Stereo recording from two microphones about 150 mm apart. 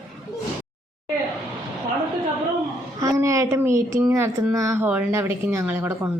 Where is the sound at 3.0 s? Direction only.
20° right (ahead or behind).